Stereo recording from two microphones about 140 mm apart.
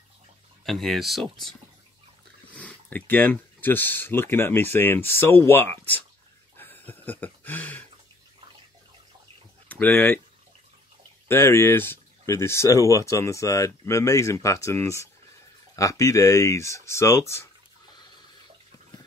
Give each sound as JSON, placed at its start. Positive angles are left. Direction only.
{"t": 0.7, "sound": "speech", "side_deg": 0}
{"t": 6.5, "sound": "a sound", "side_deg": 15}
{"t": 9.7, "sound": "speech", "side_deg": 15}
{"t": 11.2, "sound": "speech", "side_deg": 15}
{"t": 17.9, "sound": "water", "side_deg": 35}